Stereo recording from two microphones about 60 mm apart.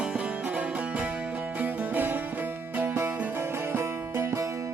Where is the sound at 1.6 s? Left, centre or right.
Right.